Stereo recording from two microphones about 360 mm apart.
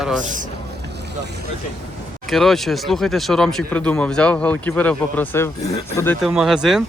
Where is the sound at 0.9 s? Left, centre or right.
Right.